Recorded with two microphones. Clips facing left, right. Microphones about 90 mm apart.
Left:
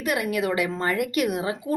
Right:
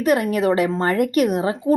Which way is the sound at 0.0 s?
40° right (ahead or behind).